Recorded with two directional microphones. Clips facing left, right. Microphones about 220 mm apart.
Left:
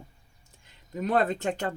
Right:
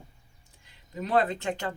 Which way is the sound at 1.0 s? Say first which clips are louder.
Left 1 dB; 45° left (ahead or behind).